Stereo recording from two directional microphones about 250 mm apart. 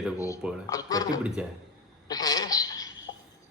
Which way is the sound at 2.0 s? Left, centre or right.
Centre.